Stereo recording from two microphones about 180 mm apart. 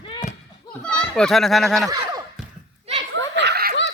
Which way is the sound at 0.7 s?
5° left (ahead or behind).